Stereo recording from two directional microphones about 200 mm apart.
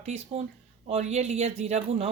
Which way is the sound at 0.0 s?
35° right (ahead or behind).